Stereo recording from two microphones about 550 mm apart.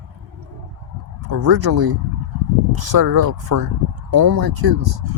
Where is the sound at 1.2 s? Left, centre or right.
Right.